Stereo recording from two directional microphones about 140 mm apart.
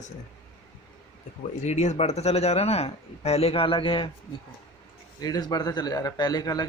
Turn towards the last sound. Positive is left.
turn(degrees=30)  # may be behind; listen again after turning